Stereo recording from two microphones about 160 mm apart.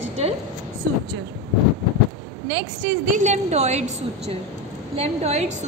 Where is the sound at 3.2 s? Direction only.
45° right (ahead or behind).